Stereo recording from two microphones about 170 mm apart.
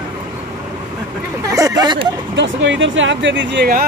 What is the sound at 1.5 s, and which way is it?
Speech, 20° right (ahead or behind).